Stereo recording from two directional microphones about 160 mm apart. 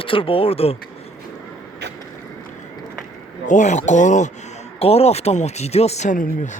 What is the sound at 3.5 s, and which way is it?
Speech, 50° left (ahead or behind).